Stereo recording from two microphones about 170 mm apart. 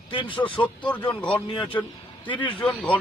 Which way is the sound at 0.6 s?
10° left (ahead or behind).